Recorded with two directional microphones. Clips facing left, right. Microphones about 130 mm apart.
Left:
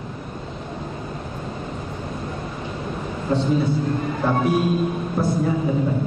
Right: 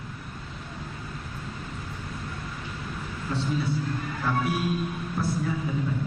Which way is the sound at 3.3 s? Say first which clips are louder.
Left 8 dB; 25° left (ahead or behind).